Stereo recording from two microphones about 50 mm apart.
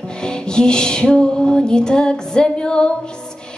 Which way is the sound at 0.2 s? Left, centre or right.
Centre.